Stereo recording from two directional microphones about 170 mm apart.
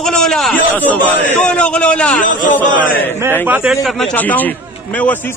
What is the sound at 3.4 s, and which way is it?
Speech, 10° right (ahead or behind).